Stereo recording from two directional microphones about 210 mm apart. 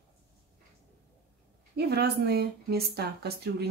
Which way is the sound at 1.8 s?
50° right (ahead or behind).